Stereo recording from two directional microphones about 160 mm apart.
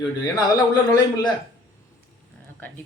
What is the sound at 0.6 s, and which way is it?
Speech, 25° left (ahead or behind).